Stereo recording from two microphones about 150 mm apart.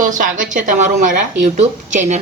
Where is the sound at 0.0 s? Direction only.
60° right (ahead or behind).